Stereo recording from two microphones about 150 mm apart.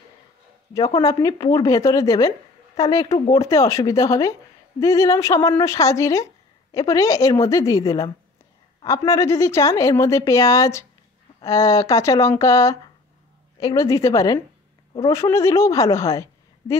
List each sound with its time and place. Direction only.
0.7 s a woman's voice: 25° left (ahead or behind)